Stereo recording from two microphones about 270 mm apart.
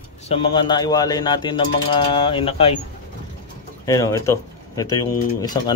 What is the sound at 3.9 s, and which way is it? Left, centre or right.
Speech, centre.